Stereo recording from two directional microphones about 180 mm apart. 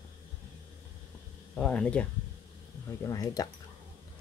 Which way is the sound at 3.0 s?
20° left (ahead or behind).